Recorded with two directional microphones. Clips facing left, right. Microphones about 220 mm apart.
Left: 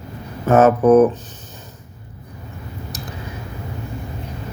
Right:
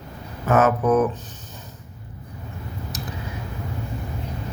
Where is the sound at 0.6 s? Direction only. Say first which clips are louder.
Left 8 dB; 40° left (ahead or behind).